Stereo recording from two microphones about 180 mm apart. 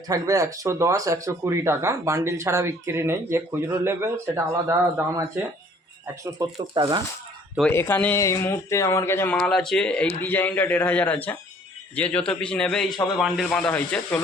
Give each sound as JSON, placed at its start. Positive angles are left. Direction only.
{"t": 0.1, "sound": "speech", "side_deg": -20}
{"t": 6.4, "sound": "speech", "side_deg": -25}
{"t": 7.7, "sound": "a man's voice", "side_deg": 10}